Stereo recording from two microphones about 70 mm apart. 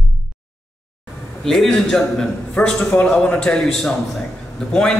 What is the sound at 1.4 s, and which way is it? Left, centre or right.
A man's voice, centre.